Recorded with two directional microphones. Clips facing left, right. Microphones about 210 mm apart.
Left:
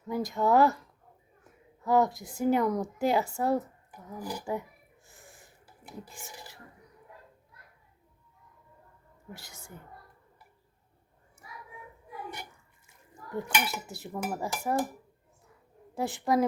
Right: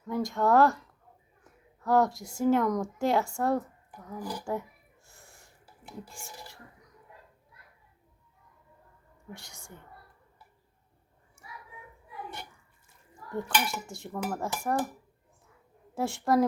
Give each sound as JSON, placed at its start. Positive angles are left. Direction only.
{"t": 0.1, "sound": "dishes", "side_deg": 5}
{"t": 1.8, "sound": "dishes", "side_deg": 0}
{"t": 5.0, "sound": "snort", "side_deg": 0}
{"t": 9.3, "sound": "dishes", "side_deg": 5}
{"t": 13.5, "sound": "dishes", "side_deg": 5}
{"t": 16.0, "sound": "dishes", "side_deg": 0}